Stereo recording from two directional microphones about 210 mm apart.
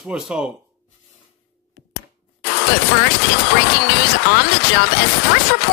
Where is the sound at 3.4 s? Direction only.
50° left (ahead or behind).